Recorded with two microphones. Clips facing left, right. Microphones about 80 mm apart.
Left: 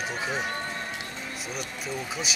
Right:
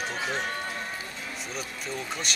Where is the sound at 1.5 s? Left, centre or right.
Centre.